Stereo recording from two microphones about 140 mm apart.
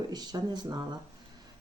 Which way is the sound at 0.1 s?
30° right (ahead or behind).